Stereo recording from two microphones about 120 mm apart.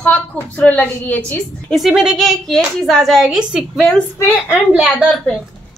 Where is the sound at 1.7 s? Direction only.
5° right (ahead or behind).